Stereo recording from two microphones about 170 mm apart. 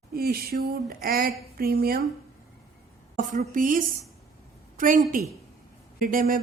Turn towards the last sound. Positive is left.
turn(degrees=-55)  # may be behind; listen again after turning